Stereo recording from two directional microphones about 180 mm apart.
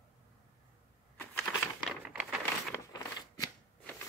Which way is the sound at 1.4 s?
5° left (ahead or behind).